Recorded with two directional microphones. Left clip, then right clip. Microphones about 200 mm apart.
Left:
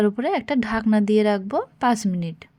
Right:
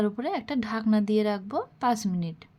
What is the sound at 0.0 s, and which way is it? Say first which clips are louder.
Speech: left 7 dB; 25° left (ahead or behind).